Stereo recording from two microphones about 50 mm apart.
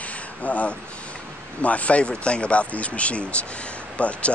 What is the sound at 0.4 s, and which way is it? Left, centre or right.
Speech, left.